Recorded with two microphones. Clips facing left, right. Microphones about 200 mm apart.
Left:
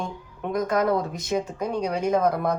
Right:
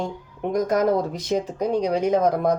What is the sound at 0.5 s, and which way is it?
Speech, 45° right (ahead or behind).